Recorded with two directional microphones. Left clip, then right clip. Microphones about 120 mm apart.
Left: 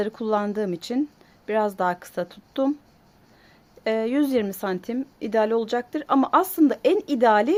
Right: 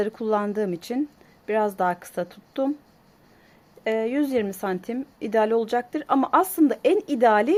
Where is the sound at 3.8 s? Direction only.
20° left (ahead or behind).